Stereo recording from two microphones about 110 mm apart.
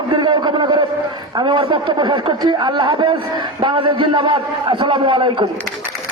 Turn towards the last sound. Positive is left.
turn(degrees=-50)  # may be behind; listen again after turning